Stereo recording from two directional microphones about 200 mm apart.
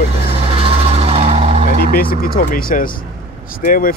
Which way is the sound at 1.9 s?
45° left (ahead or behind).